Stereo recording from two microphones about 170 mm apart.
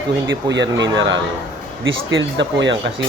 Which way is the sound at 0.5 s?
90° right.